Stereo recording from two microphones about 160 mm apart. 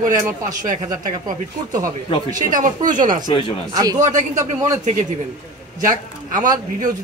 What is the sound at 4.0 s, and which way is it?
Speech, 50° right (ahead or behind).